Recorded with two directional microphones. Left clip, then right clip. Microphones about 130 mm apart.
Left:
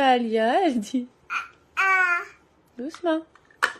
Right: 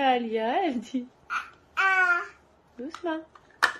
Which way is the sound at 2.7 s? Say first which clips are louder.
Left 6 dB; 75° left (ahead or behind).